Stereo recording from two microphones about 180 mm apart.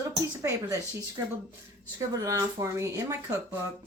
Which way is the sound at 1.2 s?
20° right (ahead or behind).